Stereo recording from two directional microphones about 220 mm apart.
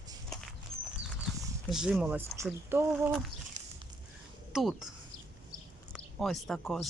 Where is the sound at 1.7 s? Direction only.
Centre (ahead or behind).